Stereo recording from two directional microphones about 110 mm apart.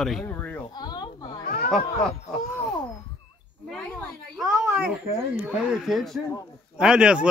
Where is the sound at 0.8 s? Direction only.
40° left (ahead or behind).